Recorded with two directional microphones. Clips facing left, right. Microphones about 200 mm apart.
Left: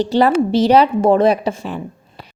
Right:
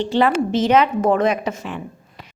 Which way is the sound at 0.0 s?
40° left (ahead or behind).